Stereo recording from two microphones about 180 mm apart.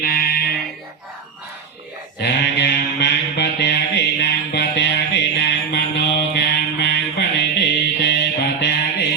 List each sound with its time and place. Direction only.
0.0 s fire alarm: 55° left (ahead or behind)
2.2 s mantra: 70° left (ahead or behind)